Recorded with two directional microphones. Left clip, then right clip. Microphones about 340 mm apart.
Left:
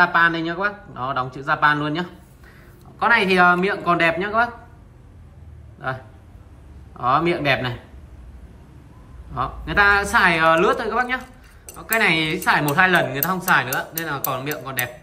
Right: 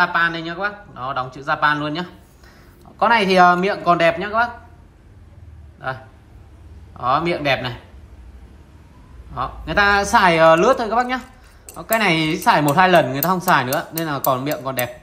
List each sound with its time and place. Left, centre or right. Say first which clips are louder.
0.0 s a man's voice: left 1 dB; centre
5.8 s a man's voice: right 1 dB; centre
9.3 s a woman's voice: right 1 dB; centre